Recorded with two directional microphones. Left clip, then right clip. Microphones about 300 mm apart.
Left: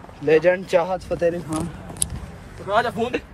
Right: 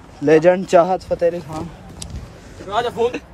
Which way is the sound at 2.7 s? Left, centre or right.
Centre.